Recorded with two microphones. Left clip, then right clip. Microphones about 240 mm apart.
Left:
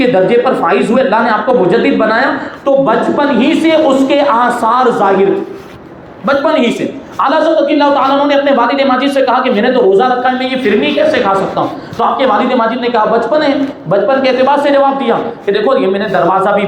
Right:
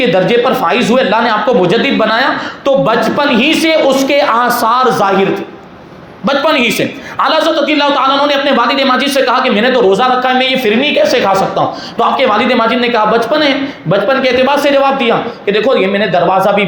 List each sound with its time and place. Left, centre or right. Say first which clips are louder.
0.0 s a man's voice: left 1 dB; right
6.2 s a man's voice: even; right